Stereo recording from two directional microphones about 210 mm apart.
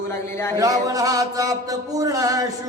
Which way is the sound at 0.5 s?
15° right (ahead or behind).